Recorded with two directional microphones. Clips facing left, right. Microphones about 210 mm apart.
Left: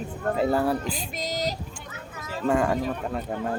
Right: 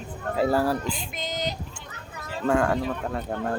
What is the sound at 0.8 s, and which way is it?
Speech, 40° left (ahead or behind).